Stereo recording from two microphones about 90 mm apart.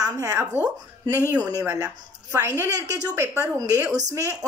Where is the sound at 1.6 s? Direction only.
30° right (ahead or behind).